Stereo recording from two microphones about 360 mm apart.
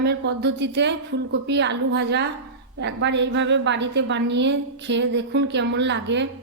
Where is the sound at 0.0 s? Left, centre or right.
Right.